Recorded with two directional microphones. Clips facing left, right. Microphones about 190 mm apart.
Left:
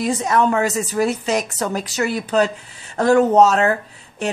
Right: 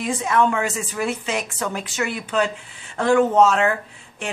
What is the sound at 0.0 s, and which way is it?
Speech, 40° left (ahead or behind).